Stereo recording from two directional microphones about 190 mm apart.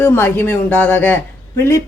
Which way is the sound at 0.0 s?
10° left (ahead or behind).